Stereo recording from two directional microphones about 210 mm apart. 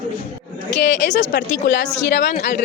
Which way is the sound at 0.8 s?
55° left (ahead or behind).